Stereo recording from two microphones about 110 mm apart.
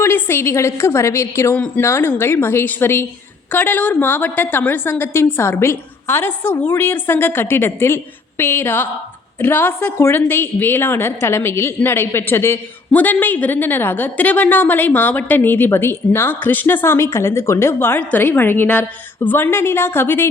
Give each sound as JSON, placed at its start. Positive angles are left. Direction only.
{"t": 0.0, "sound": "a woman's voice", "side_deg": 20}